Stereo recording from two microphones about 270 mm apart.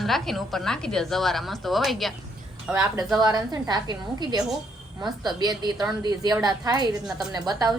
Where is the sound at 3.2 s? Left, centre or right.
Centre.